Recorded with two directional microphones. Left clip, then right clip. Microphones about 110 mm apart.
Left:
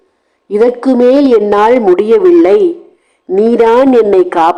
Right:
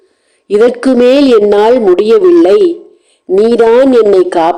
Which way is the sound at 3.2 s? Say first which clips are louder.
Right 1 dB; 35° left (ahead or behind).